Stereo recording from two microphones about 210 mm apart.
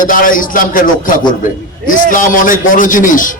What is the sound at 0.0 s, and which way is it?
A man's voice, 40° left (ahead or behind).